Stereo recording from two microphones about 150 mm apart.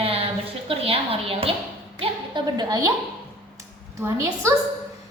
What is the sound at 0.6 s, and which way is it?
Speech, 40° right (ahead or behind).